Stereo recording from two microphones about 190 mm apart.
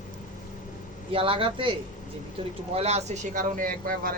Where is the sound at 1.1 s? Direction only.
30° right (ahead or behind).